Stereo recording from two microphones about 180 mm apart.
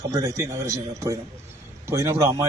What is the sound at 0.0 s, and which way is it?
A man's voice, 15° right (ahead or behind).